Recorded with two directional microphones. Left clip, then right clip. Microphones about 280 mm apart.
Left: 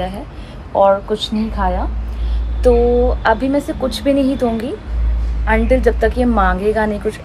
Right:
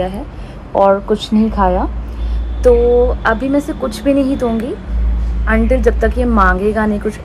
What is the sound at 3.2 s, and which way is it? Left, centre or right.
A woman's voice, centre.